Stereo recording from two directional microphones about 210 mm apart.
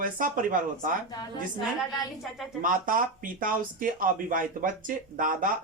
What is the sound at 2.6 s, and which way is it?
Speech, 40° right (ahead or behind).